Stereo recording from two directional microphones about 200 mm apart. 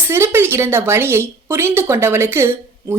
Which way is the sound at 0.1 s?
10° right (ahead or behind).